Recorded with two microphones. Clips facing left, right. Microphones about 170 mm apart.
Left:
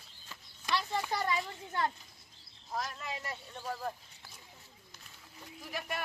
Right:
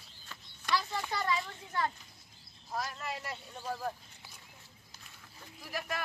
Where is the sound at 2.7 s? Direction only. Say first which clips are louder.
Right 1 dB; centre (ahead or behind).